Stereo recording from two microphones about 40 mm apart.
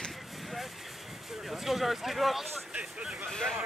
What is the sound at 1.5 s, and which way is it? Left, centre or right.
Speech, centre.